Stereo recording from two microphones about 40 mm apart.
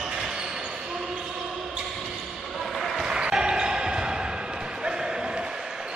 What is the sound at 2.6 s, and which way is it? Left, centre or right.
Basketball bounce, centre.